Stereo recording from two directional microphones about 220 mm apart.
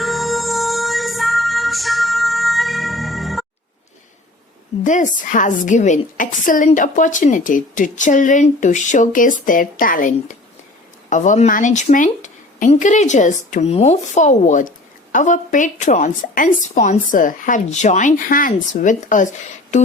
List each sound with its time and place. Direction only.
0.0 s music: centre (ahead or behind)
4.8 s a woman's voice: 35° left (ahead or behind)